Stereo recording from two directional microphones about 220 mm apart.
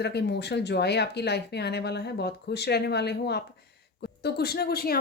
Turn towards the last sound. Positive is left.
turn(degrees=45)  # may be behind; listen again after turning